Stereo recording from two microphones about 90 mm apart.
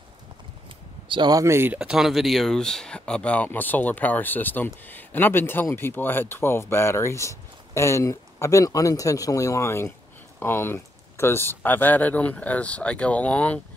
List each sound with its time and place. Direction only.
1.0 s a sound: 65° right (ahead or behind)
1.3 s speech: 30° right (ahead or behind)
1.8 s speech: 5° right (ahead or behind); by 13.6 s 15° left (ahead or behind)